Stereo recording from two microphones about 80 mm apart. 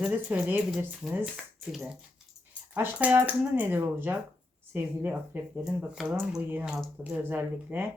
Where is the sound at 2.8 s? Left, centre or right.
Right.